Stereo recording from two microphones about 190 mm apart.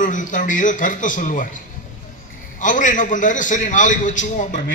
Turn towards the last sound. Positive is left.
turn(degrees=40)  # may be behind; listen again after turning